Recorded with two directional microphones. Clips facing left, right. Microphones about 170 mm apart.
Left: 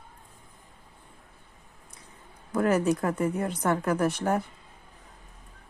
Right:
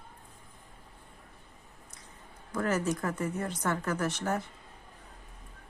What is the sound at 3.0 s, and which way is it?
Speech, 30° left (ahead or behind).